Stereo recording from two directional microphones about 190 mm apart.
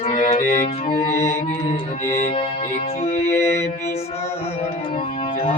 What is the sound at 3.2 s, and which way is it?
Mantra, 15° left (ahead or behind).